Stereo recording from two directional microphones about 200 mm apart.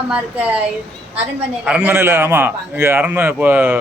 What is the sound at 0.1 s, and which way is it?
Speech, 5° right (ahead or behind).